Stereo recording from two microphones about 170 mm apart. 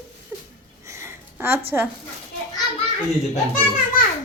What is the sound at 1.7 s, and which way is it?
Speech, 15° right (ahead or behind).